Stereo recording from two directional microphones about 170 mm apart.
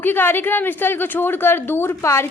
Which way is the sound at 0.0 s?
10° left (ahead or behind).